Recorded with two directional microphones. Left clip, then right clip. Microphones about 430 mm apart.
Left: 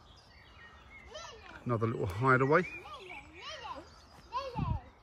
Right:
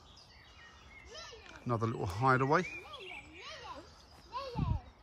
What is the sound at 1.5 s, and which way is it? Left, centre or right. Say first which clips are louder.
Speech: left 2 dB; centre.